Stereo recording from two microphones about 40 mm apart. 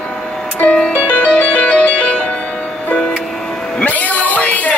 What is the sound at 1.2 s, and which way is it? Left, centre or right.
Music, left.